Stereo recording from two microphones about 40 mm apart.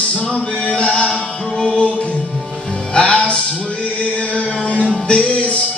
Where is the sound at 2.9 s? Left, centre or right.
Left.